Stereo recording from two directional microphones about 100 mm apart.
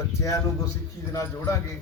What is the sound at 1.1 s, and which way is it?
Speech, 35° left (ahead or behind).